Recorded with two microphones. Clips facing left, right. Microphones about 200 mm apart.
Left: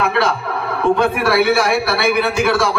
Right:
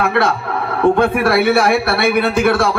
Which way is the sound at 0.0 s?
50° right (ahead or behind).